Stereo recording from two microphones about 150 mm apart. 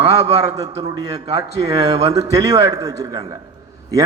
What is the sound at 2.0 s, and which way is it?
A man's voice, 25° right (ahead or behind).